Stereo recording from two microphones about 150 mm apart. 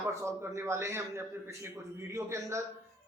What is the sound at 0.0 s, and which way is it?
A man's voice, 20° right (ahead or behind).